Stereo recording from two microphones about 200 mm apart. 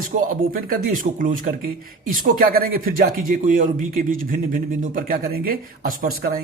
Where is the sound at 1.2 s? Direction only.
45° right (ahead or behind).